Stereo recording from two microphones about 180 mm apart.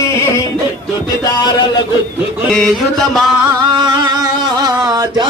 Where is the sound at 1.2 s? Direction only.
25° left (ahead or behind).